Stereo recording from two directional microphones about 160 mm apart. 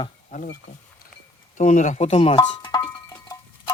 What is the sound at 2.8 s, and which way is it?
Music, 10° left (ahead or behind).